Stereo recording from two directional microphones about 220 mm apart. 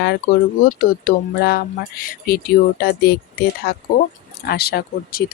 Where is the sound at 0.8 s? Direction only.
45° left (ahead or behind).